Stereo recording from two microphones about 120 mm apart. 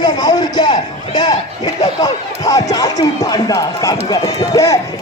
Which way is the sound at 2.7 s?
30° left (ahead or behind).